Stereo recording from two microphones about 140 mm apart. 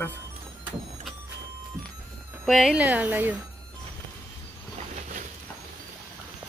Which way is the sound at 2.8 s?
15° right (ahead or behind).